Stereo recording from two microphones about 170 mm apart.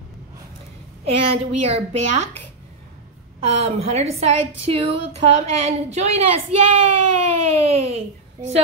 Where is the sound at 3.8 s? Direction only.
40° right (ahead or behind).